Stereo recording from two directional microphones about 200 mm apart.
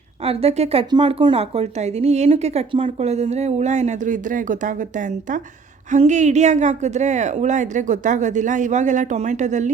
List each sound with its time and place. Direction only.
0.2 s speech: 30° right (ahead or behind)